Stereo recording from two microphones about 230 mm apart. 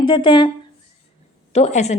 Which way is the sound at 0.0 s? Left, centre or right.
Left.